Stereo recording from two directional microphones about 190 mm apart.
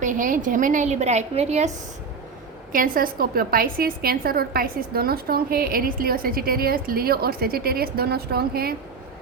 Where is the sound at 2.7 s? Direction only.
45° right (ahead or behind).